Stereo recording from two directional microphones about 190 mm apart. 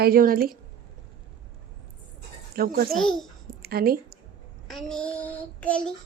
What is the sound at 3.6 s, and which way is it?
Speech, 55° right (ahead or behind).